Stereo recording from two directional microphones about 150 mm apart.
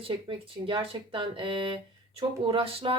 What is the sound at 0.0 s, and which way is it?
A woman's voice, 35° right (ahead or behind).